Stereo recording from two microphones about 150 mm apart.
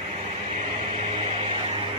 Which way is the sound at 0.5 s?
45° right (ahead or behind).